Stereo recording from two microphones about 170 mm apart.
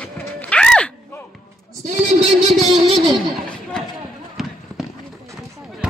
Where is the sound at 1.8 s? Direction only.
45° right (ahead or behind).